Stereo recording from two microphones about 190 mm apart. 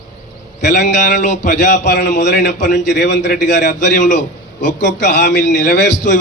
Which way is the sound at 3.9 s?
40° left (ahead or behind).